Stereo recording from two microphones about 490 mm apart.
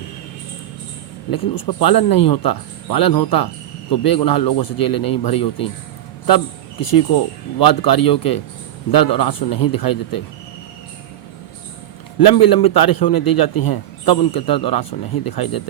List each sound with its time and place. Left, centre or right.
1.3 s a man's voice: left
12.2 s a man's voice: left